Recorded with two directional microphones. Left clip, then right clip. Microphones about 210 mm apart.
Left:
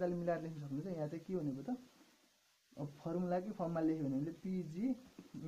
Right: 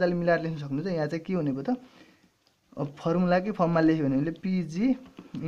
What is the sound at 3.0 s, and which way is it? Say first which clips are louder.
Speech: right 14 dB; 35° right (ahead or behind).